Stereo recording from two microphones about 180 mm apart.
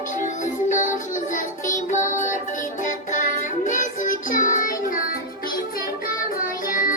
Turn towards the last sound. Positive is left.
turn(degrees=50)  # may be behind; listen again after turning